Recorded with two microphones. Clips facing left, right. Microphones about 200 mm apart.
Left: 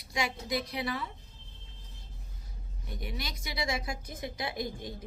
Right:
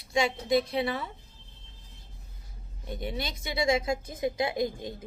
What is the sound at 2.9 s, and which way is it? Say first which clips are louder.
Speech: right 6 dB; 25° right (ahead or behind).